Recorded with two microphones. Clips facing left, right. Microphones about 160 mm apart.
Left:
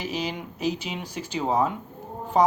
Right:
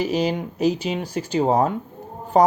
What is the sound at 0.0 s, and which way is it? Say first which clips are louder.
Speech: right 8 dB; 40° right (ahead or behind).